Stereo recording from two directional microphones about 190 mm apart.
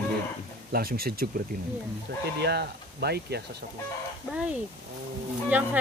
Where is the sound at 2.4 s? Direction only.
60° right (ahead or behind).